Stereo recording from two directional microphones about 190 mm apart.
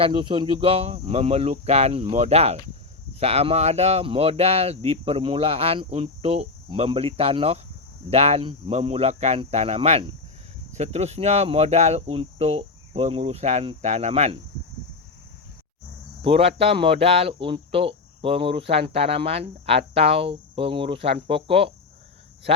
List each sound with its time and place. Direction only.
0.0 s speech: 25° right (ahead or behind)
16.2 s speech: 30° right (ahead or behind)